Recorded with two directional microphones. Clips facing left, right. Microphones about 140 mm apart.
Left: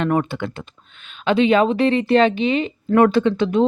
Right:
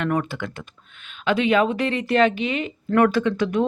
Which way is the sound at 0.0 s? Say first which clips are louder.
Left 4 dB; 25° left (ahead or behind).